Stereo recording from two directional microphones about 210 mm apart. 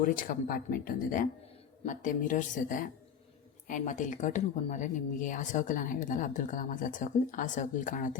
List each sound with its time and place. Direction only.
0.0 s speech: 40° left (ahead or behind)